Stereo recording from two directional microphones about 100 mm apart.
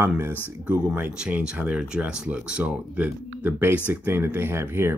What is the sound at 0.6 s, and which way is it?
Speech, 10° right (ahead or behind).